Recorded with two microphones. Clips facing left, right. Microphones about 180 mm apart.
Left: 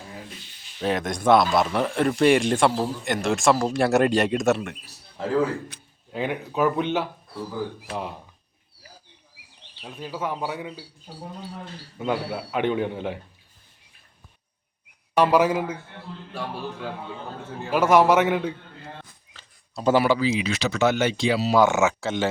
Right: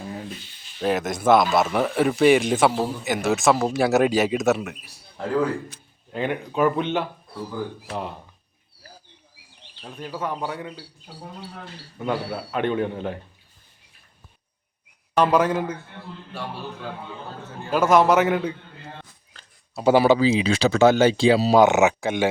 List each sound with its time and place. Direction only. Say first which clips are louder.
0.8 s a man's voice: right 2 dB; centre (ahead or behind)
9.8 s speech: even; 10° left (ahead or behind)
11.9 s a man's voice: even; 5° left (ahead or behind)
15.2 s speech: even; 5° left (ahead or behind)
17.7 s a man's voice: even; 10° left (ahead or behind)
19.3 s a sound: right 1 dB; centre (ahead or behind)
20.0 s speech: right 6 dB; 25° right (ahead or behind)
21.5 s speech: right 3 dB; 20° right (ahead or behind)